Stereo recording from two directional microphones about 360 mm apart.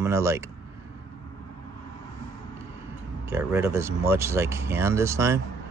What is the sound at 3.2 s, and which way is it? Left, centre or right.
Speech, centre.